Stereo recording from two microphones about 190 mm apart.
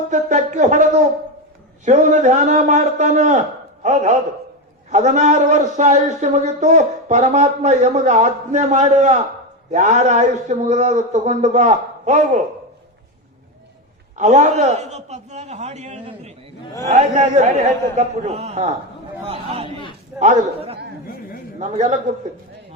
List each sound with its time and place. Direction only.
0.1 s a man's voice: 40° right (ahead or behind)
14.2 s a man's voice: 40° right (ahead or behind)